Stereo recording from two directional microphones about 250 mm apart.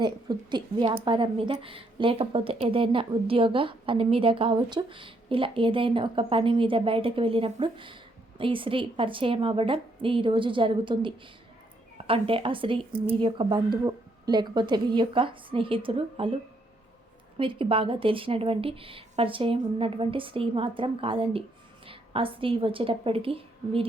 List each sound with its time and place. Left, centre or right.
0.0 s a woman's voice: centre
17.3 s a woman's voice: right